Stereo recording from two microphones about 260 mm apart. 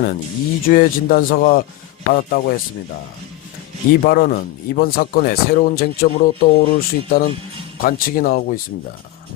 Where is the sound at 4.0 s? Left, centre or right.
Left.